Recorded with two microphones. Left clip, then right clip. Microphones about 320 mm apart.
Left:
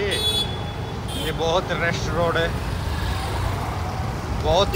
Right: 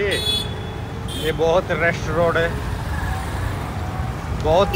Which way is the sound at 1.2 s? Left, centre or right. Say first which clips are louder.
Right 4 dB; centre.